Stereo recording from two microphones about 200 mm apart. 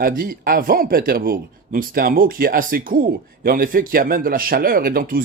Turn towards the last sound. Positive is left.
turn(degrees=-45)  # may be behind; listen again after turning